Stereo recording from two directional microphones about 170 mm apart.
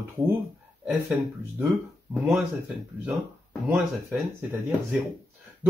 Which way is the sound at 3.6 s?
5° right (ahead or behind).